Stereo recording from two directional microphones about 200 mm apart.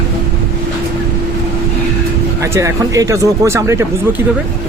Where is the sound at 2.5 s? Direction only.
15° right (ahead or behind).